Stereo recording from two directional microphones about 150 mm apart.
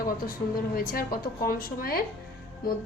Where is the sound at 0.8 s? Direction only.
75° left (ahead or behind).